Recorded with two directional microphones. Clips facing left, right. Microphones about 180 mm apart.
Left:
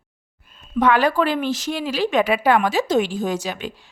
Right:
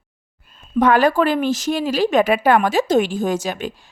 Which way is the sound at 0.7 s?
45° right (ahead or behind).